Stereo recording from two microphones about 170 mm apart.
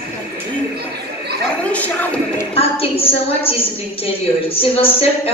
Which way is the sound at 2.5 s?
35° left (ahead or behind).